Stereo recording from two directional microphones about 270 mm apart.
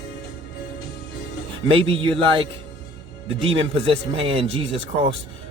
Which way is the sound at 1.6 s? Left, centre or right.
Centre.